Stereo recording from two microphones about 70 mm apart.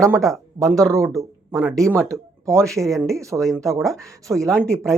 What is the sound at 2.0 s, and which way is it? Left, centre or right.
Speech, right.